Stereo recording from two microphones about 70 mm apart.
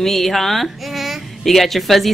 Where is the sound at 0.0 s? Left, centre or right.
Centre.